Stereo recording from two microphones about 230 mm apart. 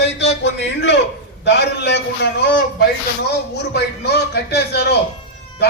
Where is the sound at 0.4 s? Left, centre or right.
Left.